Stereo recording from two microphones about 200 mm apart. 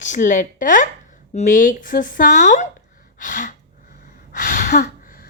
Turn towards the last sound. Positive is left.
turn(degrees=45)  # may be behind; listen again after turning